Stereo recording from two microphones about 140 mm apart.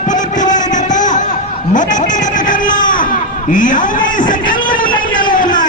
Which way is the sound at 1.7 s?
65° left (ahead or behind).